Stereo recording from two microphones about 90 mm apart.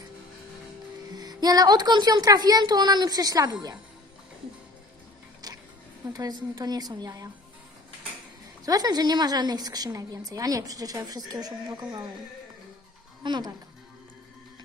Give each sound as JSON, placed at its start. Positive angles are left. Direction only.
{"t": 1.1, "sound": "a woman's voice", "side_deg": -50}
{"t": 5.4, "sound": "music", "side_deg": -45}
{"t": 6.1, "sound": "a woman's voice", "side_deg": -45}
{"t": 8.6, "sound": "a woman's voice", "side_deg": -45}
{"t": 13.2, "sound": "speech", "side_deg": -55}